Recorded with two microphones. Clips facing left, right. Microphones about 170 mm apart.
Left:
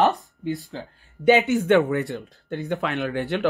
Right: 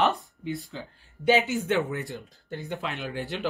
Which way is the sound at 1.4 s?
65° left (ahead or behind).